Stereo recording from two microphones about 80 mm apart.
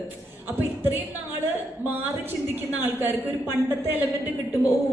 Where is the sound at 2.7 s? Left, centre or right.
Right.